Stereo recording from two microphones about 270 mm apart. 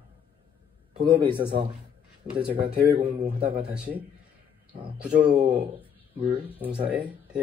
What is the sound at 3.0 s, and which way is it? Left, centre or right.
Speech, centre.